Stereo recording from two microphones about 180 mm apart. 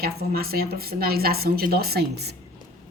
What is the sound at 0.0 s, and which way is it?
A woman's voice, 55° right (ahead or behind).